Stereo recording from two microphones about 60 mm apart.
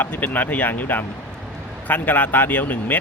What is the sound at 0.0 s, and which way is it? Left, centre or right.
Speech, left.